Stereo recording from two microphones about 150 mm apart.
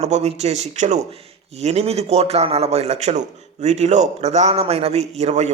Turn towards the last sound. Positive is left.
turn(degrees=-50)  # may be behind; listen again after turning